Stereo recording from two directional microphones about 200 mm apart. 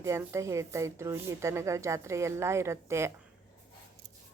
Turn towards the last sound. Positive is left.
turn(degrees=-15)  # may be behind; listen again after turning